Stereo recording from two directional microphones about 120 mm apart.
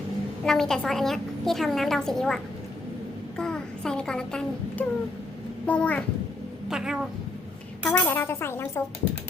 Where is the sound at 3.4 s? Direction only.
5° left (ahead or behind).